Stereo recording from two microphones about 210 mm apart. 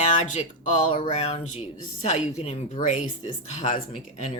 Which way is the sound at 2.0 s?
35° left (ahead or behind).